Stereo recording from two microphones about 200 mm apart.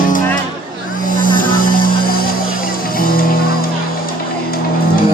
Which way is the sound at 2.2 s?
45° left (ahead or behind).